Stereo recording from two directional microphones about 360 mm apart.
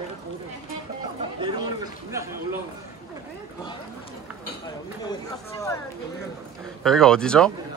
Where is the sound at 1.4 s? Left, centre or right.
Centre.